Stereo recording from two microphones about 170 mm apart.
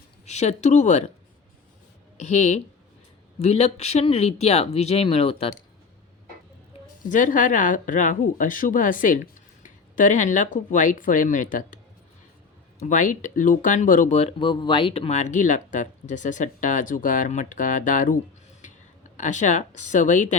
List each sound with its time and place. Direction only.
0.3 s speech: 40° left (ahead or behind)
2.1 s speech: 45° left (ahead or behind)
7.0 s speech: 50° left (ahead or behind)
12.8 s speech: 50° left (ahead or behind)